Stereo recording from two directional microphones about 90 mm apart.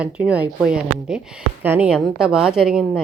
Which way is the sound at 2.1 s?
10° right (ahead or behind).